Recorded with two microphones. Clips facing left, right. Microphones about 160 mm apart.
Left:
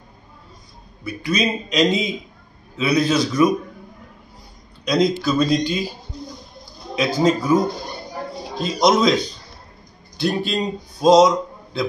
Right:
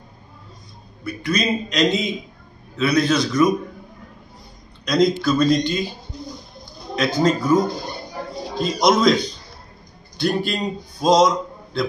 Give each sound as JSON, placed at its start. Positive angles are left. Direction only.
{"t": 1.0, "sound": "a man's voice", "side_deg": 5}
{"t": 4.8, "sound": "speech", "side_deg": 5}
{"t": 7.0, "sound": "speech", "side_deg": 10}
{"t": 8.7, "sound": "a man's voice", "side_deg": 0}